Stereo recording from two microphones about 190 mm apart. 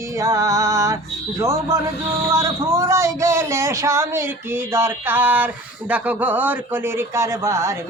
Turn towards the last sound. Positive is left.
turn(degrees=-15)  # may be behind; listen again after turning